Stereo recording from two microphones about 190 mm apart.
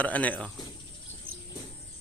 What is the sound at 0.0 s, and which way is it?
Speech, 10° left (ahead or behind).